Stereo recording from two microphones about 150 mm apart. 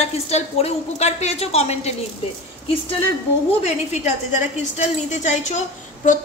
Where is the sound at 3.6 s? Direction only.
50° left (ahead or behind).